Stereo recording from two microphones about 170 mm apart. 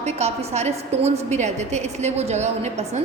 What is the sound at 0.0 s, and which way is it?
A woman's voice, 40° right (ahead or behind).